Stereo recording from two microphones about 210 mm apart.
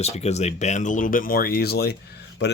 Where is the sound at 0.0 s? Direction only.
30° left (ahead or behind).